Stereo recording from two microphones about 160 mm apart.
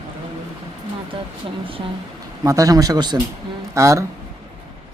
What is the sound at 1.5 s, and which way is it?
Speech, 35° right (ahead or behind).